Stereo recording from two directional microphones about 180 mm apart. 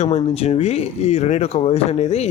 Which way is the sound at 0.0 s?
35° left (ahead or behind).